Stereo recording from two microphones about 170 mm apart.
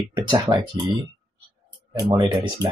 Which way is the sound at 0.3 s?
25° right (ahead or behind).